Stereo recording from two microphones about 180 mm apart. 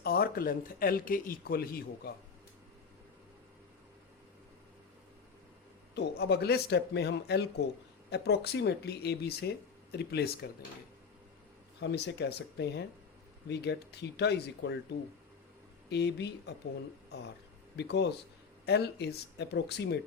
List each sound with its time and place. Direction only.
0.0 s speech: 60° left (ahead or behind)
5.9 s speech: 65° left (ahead or behind)
11.8 s speech: 70° left (ahead or behind)
15.9 s speech: 70° left (ahead or behind)
17.7 s speech: 70° left (ahead or behind)